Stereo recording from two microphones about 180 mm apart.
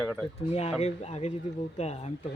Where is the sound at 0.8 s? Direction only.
35° left (ahead or behind).